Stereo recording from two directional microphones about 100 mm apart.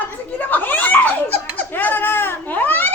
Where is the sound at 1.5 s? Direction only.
20° left (ahead or behind).